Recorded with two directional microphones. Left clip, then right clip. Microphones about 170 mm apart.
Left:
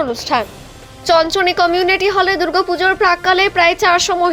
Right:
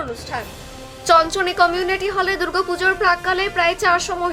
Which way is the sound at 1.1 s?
20° left (ahead or behind).